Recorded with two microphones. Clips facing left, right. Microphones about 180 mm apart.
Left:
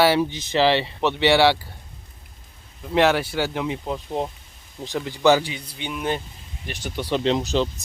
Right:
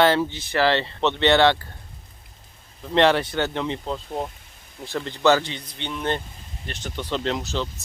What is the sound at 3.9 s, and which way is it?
Speech, 20° left (ahead or behind).